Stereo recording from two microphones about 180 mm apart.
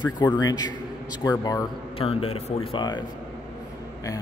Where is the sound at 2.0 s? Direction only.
30° left (ahead or behind).